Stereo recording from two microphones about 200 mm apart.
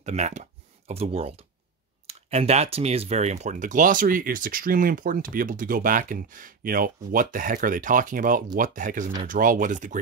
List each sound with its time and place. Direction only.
0.0 s speech: 35° right (ahead or behind)